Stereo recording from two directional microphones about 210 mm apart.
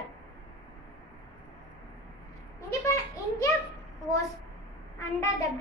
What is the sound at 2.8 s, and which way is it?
Speech, 15° left (ahead or behind).